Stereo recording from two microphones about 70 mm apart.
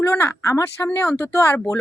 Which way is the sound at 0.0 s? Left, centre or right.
Left.